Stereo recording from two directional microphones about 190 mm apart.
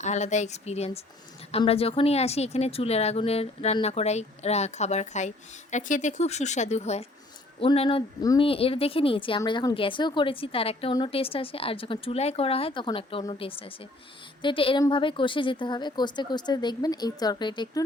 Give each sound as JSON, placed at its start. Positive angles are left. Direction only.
{"t": 0.0, "sound": "a woman's voice", "side_deg": 40}